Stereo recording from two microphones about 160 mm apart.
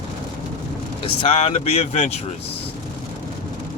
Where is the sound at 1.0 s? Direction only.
35° left (ahead or behind).